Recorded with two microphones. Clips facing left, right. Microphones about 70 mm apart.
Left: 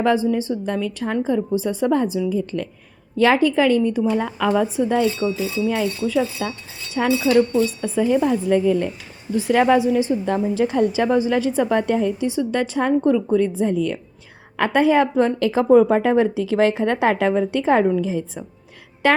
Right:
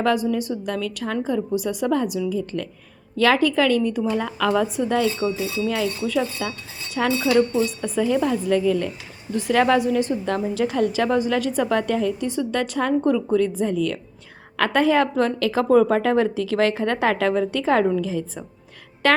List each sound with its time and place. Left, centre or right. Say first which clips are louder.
0.0 s a woman's voice: left 2 dB; left
7.3 s speech: left 2 dB; centre
7.9 s speech: left 3 dB; centre
9.3 s a woman's voice: left 2 dB; centre